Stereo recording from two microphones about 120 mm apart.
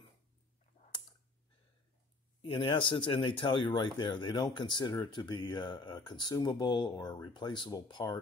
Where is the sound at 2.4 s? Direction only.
45° left (ahead or behind).